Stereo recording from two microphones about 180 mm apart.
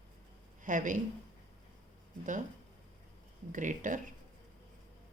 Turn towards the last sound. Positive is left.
turn(degrees=-45)  # may be behind; listen again after turning